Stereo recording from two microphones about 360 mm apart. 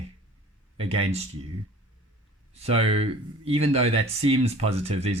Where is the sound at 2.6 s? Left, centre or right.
Centre.